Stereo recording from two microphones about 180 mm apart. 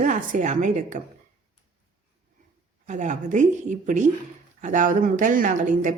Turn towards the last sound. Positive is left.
turn(degrees=-45)  # may be behind; listen again after turning